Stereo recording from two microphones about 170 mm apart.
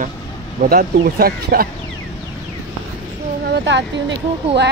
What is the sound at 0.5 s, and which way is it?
Speech, 60° right (ahead or behind).